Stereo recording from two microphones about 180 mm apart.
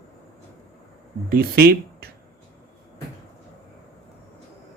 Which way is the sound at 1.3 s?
55° right (ahead or behind).